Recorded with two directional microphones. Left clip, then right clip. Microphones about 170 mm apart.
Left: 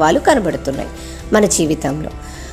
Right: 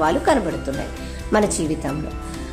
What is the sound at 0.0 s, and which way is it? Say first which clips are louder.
Speech: left 6 dB; 30° left (ahead or behind).